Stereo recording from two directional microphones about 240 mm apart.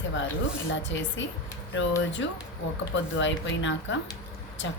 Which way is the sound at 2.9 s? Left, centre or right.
Left.